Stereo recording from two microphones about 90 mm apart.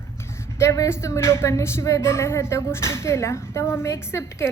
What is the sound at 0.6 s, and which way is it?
A woman's voice, 30° left (ahead or behind).